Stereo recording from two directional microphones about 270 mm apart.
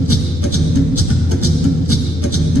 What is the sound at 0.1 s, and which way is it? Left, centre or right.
Music, left.